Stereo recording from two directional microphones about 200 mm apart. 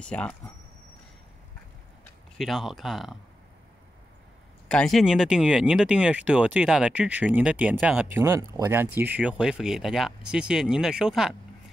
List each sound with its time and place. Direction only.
0.0 s speech: 5° left (ahead or behind)
2.3 s speech: centre (ahead or behind)
4.6 s speech: 5° left (ahead or behind)